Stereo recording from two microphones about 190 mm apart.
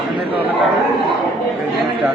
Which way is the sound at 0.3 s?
10° right (ahead or behind).